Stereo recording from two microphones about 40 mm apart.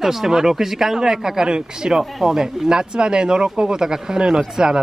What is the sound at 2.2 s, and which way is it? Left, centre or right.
Speech, centre.